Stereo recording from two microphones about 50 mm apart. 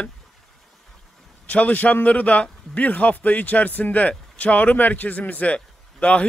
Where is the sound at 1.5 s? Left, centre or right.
Left.